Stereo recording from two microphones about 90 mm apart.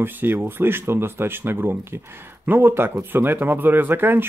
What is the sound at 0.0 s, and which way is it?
Speech, 25° right (ahead or behind).